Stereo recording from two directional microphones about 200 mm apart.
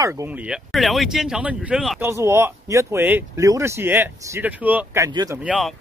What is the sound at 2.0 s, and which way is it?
Speech, 15° right (ahead or behind).